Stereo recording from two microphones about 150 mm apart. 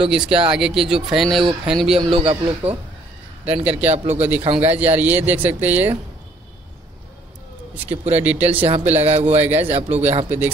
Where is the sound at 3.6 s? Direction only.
10° right (ahead or behind).